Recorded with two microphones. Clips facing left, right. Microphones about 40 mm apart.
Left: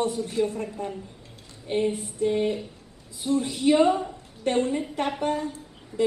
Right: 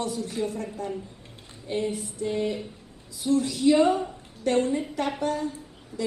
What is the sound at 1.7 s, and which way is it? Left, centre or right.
Female singing, left.